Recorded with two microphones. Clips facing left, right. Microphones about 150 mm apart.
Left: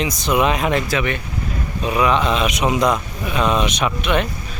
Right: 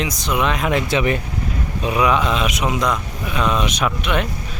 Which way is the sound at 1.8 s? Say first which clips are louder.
Even; 10° right (ahead or behind).